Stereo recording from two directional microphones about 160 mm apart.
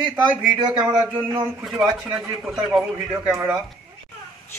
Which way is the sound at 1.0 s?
30° right (ahead or behind).